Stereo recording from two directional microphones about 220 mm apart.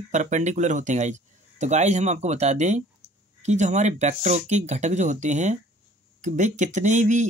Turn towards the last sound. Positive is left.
turn(degrees=-35)  # may be behind; listen again after turning